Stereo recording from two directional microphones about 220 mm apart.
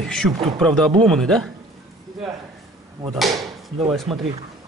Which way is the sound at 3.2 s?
Centre (ahead or behind).